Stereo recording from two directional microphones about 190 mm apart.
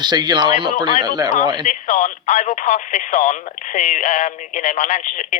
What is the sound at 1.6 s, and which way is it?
Speech, 40° left (ahead or behind).